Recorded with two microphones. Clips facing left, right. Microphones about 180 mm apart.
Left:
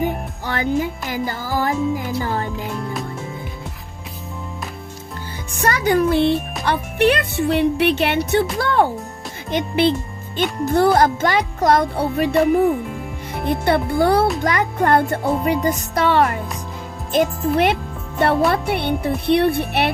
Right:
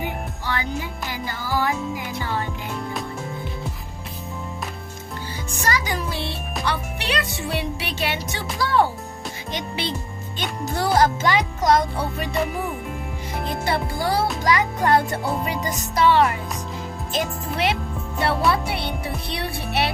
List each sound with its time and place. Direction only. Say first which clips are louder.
0.4 s music: left 8 dB; 45° left (ahead or behind)
2.7 s music: left 3 dB; centre (ahead or behind)
5.5 s music: left 9 dB; 60° left (ahead or behind)
9.5 s speech: left 12 dB; 55° left (ahead or behind)
10.3 s music: left 9 dB; 55° left (ahead or behind)
13.5 s music: left 8 dB; 60° left (ahead or behind)
17.1 s speech: left 9 dB; 55° left (ahead or behind)